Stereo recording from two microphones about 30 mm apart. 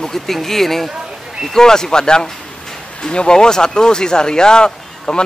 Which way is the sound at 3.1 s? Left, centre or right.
Left.